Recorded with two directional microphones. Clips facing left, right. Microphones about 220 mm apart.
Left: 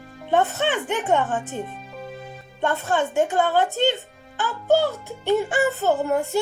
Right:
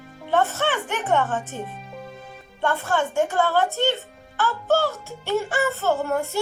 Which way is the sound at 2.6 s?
20° left (ahead or behind).